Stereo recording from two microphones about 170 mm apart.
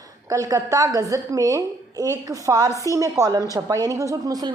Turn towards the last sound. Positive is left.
turn(degrees=-20)  # may be behind; listen again after turning